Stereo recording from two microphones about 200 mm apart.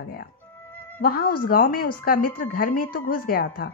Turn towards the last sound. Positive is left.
turn(degrees=50)  # may be behind; listen again after turning